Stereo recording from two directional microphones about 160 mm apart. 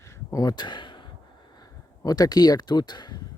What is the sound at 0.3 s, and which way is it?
Speech, 20° left (ahead or behind).